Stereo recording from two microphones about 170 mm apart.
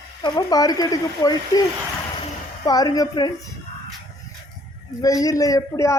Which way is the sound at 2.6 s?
20° left (ahead or behind).